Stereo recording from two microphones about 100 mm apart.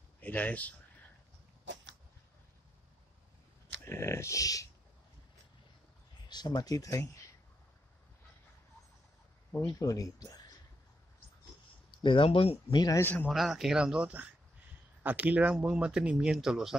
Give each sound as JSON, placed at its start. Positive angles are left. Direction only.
{"t": 0.2, "sound": "speech", "side_deg": 15}
{"t": 3.8, "sound": "speech", "side_deg": 25}
{"t": 6.2, "sound": "speech", "side_deg": 45}
{"t": 9.6, "sound": "speech", "side_deg": 30}
{"t": 12.0, "sound": "speech", "side_deg": 60}
{"t": 13.0, "sound": "speech", "side_deg": 20}
{"t": 13.3, "sound": "speech", "side_deg": 0}